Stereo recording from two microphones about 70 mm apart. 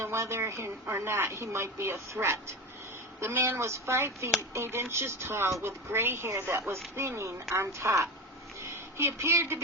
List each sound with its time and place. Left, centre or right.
0.0 s a woman's voice: right